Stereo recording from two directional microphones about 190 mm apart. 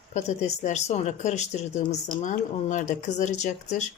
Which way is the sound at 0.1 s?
35° left (ahead or behind).